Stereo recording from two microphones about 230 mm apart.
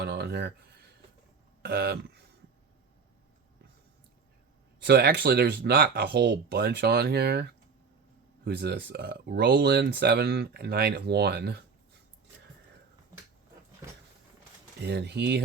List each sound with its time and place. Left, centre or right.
0.0 s a sound: right
1.6 s speech: right
4.8 s speech: right
14.8 s speech: right